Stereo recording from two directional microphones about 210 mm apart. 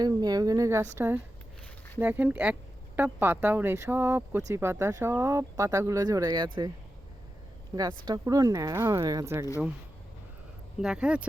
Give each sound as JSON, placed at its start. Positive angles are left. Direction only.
{"t": 0.0, "sound": "speech", "side_deg": -20}
{"t": 8.0, "sound": "speech", "side_deg": -20}
{"t": 10.8, "sound": "speech", "side_deg": -5}